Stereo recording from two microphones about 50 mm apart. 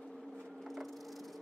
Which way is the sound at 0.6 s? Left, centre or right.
Centre.